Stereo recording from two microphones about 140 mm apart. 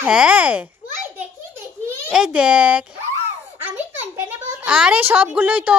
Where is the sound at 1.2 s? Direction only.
15° right (ahead or behind).